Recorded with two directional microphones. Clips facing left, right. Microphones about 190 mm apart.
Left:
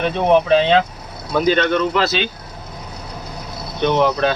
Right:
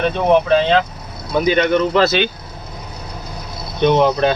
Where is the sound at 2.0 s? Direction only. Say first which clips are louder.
Right 4 dB; 60° right (ahead or behind).